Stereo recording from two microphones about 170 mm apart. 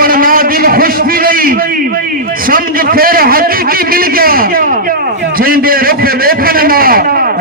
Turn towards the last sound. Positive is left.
turn(degrees=-60)  # may be behind; listen again after turning